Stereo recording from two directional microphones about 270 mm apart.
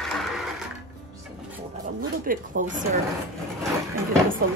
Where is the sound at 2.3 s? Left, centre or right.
Right.